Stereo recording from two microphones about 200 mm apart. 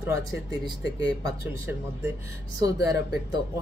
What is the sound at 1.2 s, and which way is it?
Speech, 15° right (ahead or behind).